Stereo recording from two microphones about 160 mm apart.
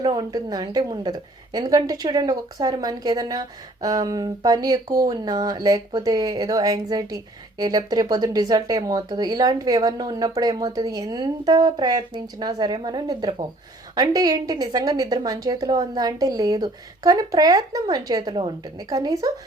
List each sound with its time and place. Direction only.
0.0 s a woman's voice: 25° right (ahead or behind)